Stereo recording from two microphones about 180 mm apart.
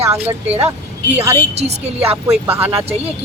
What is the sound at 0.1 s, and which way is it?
Speech, 10° right (ahead or behind).